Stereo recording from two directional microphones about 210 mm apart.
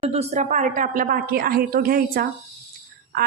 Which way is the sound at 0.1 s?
30° right (ahead or behind).